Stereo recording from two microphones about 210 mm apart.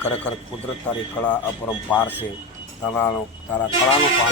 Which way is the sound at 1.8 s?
5° left (ahead or behind).